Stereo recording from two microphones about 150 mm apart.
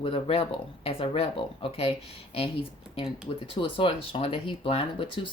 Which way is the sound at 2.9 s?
35° left (ahead or behind).